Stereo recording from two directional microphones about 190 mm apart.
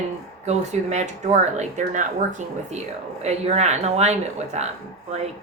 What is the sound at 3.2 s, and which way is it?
Speech, 35° right (ahead or behind).